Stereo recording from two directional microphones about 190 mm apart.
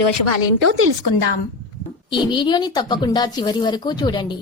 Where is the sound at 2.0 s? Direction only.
25° left (ahead or behind).